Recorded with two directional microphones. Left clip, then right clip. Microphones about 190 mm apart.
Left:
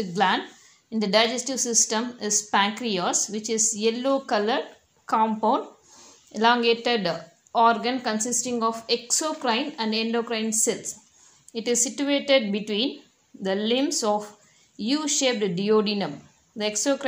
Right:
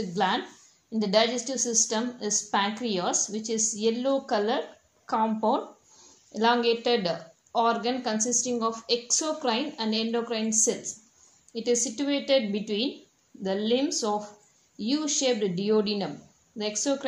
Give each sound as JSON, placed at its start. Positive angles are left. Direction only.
{"t": 0.1, "sound": "a woman's voice", "side_deg": 30}